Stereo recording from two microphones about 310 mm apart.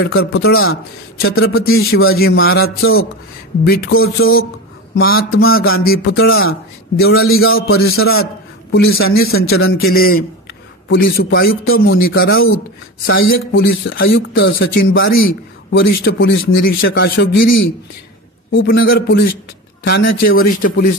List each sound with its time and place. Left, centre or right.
0.0 s speech: left
1.2 s speech: left
1.7 s speech: left
3.6 s speech: left
5.4 s speech: left
5.9 s speech: left